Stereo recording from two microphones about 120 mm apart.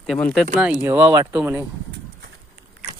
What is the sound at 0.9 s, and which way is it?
Speech, 20° right (ahead or behind).